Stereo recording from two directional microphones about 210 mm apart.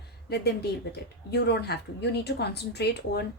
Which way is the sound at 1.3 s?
50° left (ahead or behind).